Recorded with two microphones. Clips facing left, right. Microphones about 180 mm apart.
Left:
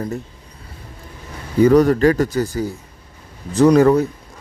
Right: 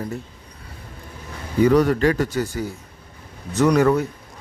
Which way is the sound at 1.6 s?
40° left (ahead or behind).